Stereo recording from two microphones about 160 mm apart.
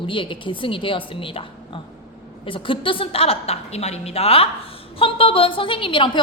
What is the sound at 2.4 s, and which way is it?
A woman's voice, 35° left (ahead or behind).